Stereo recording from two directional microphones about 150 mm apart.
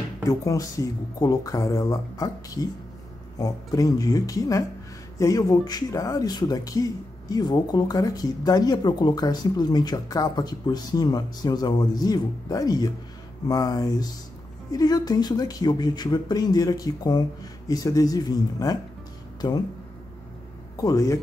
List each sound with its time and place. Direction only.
0.3 s speech: 20° left (ahead or behind)
20.7 s speech: 25° left (ahead or behind)